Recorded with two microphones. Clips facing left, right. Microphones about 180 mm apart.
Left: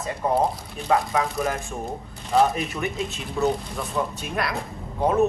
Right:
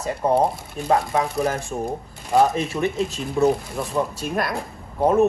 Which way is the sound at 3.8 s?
Centre (ahead or behind).